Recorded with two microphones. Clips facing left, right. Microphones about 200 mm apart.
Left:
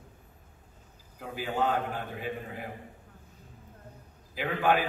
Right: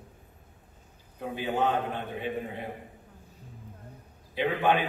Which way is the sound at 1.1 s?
25° right (ahead or behind).